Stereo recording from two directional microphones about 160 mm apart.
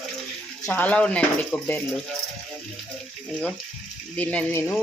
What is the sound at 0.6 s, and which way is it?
Speech, 10° left (ahead or behind).